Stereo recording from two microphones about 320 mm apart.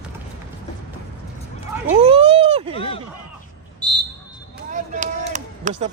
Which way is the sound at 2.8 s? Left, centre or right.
Centre.